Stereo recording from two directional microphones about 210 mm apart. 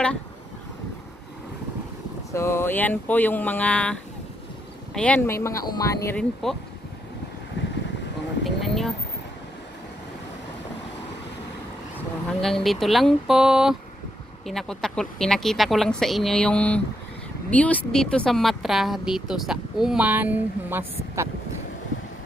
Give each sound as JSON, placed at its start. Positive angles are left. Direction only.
{"t": 2.3, "sound": "speech", "side_deg": 10}
{"t": 7.6, "sound": "boat", "side_deg": 60}
{"t": 8.5, "sound": "a sound", "side_deg": 0}
{"t": 12.4, "sound": "speech", "side_deg": 0}